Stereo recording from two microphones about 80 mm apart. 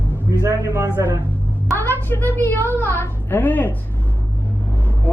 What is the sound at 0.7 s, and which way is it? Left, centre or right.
Speech, right.